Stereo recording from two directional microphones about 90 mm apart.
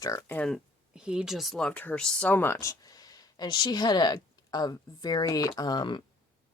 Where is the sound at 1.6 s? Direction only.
20° left (ahead or behind).